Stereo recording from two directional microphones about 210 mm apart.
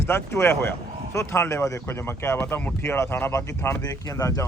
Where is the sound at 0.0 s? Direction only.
10° left (ahead or behind).